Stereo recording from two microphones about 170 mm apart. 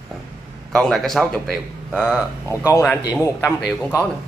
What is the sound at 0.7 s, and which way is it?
A man's voice, centre (ahead or behind).